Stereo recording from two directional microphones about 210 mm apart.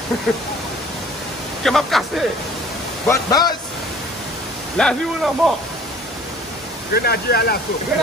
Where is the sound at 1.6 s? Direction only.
Centre (ahead or behind).